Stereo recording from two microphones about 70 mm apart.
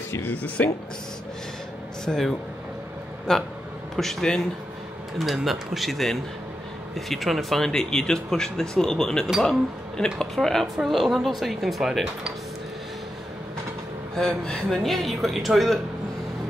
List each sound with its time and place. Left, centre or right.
0.1 s speech: left
2.0 s speech: centre
14.1 s speech: centre